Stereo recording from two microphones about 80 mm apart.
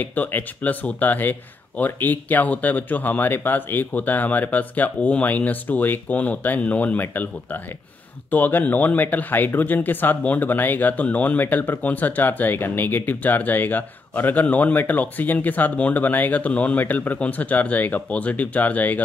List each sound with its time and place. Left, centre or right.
0.0 s speech: left